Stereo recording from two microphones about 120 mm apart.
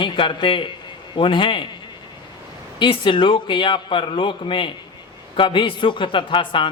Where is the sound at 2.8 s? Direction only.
45° left (ahead or behind).